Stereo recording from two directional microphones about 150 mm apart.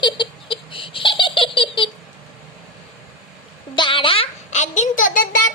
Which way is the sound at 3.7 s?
35° left (ahead or behind).